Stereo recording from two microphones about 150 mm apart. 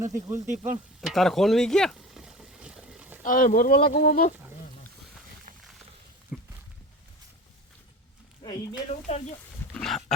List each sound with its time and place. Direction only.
0.1 s speech: 20° right (ahead or behind)
0.4 s sizzle: 55° right (ahead or behind)
1.0 s boat: centre (ahead or behind)
3.2 s speech: 65° left (ahead or behind); by 4.3 s 85° left
6.3 s a sound: 5° right (ahead or behind)
8.9 s speech: 50° left (ahead or behind)
9.7 s dog: 5° left (ahead or behind)